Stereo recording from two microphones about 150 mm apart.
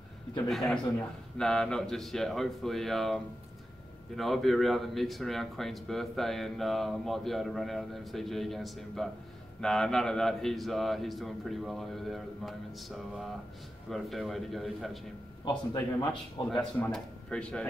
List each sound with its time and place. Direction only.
0.5 s speech: centre (ahead or behind)
4.2 s speech: centre (ahead or behind)
15.4 s a man's voice: 30° left (ahead or behind)
16.8 s speech: 5° left (ahead or behind)